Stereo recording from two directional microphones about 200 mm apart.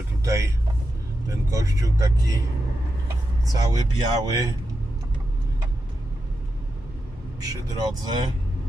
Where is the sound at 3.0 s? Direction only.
20° right (ahead or behind).